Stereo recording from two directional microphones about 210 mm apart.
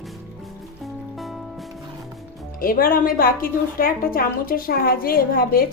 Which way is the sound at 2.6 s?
45° left (ahead or behind).